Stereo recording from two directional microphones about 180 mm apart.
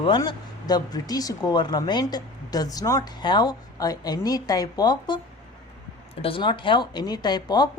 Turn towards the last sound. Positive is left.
turn(degrees=20)  # may be behind; listen again after turning